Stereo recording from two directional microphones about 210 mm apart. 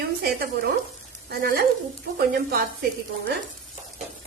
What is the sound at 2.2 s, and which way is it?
Speech, 45° right (ahead or behind).